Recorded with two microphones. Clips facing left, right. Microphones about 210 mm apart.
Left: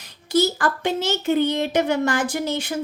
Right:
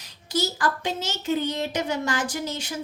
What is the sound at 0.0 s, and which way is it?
A woman's voice, 55° left (ahead or behind).